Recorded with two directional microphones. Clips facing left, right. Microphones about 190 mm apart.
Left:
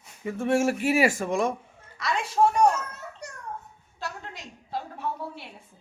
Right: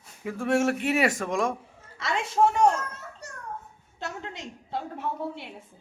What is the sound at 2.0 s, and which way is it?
Speech, 25° right (ahead or behind).